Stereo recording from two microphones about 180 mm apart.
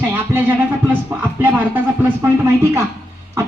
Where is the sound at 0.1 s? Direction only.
15° right (ahead or behind).